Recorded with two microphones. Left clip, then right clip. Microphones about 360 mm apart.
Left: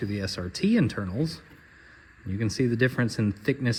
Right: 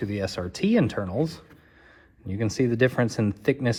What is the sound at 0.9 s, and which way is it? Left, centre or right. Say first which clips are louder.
Speech: right 5 dB; right.